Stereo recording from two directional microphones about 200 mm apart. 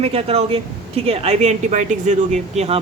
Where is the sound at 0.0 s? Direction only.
30° right (ahead or behind).